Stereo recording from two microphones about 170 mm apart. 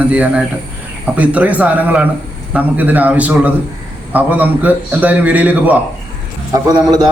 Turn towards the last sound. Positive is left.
turn(degrees=-25)  # may be behind; listen again after turning